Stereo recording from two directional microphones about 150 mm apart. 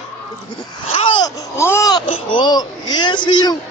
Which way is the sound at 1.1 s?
25° left (ahead or behind).